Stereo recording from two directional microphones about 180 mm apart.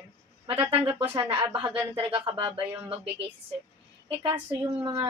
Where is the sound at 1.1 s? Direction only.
30° right (ahead or behind).